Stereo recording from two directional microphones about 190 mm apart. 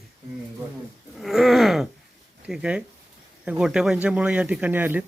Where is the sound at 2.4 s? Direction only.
5° right (ahead or behind).